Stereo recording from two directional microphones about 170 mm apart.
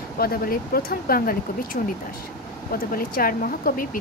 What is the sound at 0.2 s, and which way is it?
Speech, 60° left (ahead or behind).